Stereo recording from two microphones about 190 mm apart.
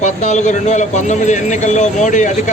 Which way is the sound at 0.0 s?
35° left (ahead or behind).